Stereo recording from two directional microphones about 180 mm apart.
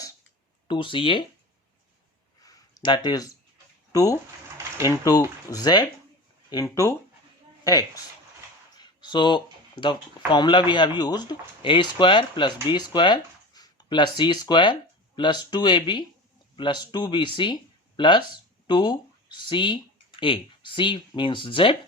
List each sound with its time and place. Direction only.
0.7 s speech: 30° left (ahead or behind)
2.4 s a sound: 20° left (ahead or behind)
3.9 s speech: 20° left (ahead or behind)